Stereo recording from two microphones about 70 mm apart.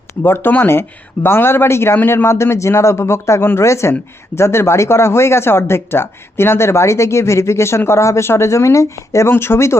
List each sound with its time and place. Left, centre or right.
0.2 s speech: left
9.3 s speech: left